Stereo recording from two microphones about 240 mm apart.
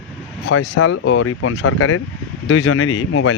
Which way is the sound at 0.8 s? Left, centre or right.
Left.